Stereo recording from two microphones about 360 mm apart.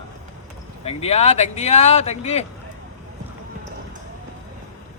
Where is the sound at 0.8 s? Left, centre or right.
Centre.